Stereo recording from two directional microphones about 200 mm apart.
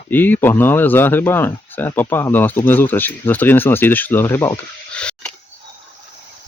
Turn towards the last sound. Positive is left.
turn(degrees=5)  # may be behind; listen again after turning